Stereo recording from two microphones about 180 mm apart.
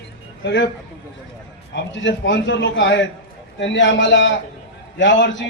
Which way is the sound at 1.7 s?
90° left.